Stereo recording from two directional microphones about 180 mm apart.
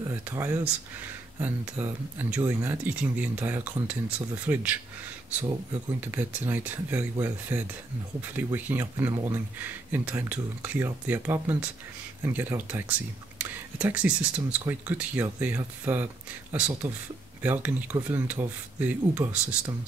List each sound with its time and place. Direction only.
0.0 s speech: 15° right (ahead or behind)
5.9 s speech: 10° right (ahead or behind)